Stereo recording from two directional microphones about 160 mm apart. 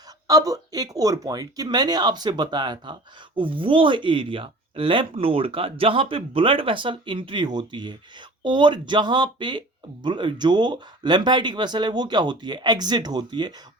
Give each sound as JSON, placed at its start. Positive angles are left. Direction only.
{"t": 0.3, "sound": "speech", "side_deg": -20}